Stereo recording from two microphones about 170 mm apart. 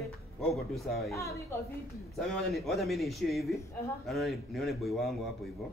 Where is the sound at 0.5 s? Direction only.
Centre (ahead or behind).